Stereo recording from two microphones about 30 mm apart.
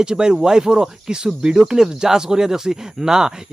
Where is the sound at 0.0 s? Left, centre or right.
Right.